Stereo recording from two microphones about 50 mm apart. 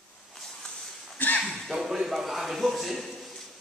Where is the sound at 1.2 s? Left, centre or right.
Left.